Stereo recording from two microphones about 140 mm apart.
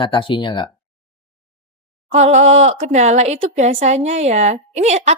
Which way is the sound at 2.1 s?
50° right (ahead or behind).